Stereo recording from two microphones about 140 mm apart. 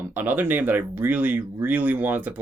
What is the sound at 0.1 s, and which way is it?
Speech, 15° right (ahead or behind).